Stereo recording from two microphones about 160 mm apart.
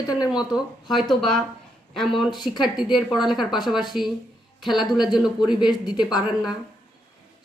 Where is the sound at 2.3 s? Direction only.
25° left (ahead or behind).